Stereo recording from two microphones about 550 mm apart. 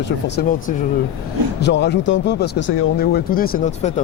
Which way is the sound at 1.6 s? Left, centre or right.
Centre.